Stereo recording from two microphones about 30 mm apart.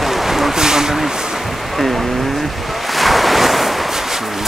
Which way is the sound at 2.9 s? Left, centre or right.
Centre.